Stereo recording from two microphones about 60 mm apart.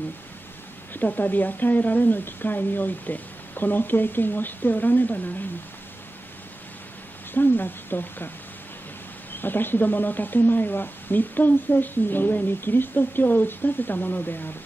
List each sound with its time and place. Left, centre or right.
0.9 s speech: left
7.3 s speech: left
9.3 s speech: left